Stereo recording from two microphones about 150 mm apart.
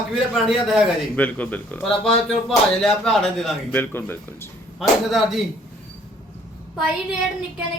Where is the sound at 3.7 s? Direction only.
10° left (ahead or behind).